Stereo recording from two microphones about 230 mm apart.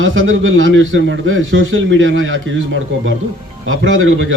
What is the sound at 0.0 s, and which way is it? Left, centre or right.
A man's voice, right.